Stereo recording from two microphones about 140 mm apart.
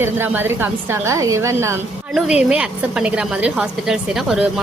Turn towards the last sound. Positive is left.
turn(degrees=-5)  # may be behind; listen again after turning